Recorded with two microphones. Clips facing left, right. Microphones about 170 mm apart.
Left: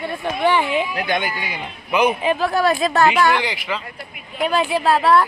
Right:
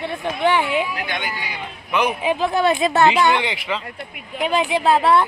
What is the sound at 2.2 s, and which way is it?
A woman's voice, 15° right (ahead or behind).